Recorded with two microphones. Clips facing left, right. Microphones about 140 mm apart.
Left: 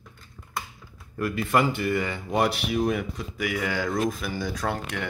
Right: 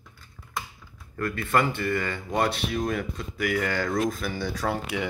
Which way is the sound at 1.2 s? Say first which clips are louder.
Left 1 dB; 10° left (ahead or behind).